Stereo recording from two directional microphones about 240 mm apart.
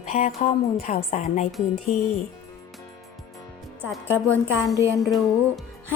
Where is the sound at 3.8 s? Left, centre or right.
Centre.